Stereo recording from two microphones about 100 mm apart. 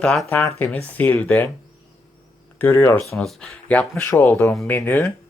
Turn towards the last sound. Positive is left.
turn(degrees=20)  # may be behind; listen again after turning